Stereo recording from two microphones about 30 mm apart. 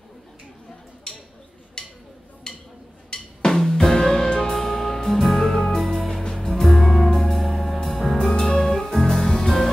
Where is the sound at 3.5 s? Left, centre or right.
Centre.